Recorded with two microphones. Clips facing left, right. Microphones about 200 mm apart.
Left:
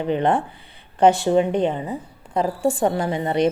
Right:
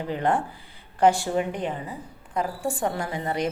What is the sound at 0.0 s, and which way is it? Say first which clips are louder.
Speech: left 5 dB; 20° left (ahead or behind).